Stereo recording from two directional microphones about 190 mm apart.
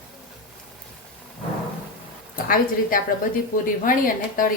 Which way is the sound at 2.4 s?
50° left (ahead or behind).